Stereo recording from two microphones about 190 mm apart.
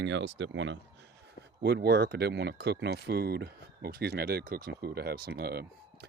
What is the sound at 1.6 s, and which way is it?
Speech, 60° right (ahead or behind).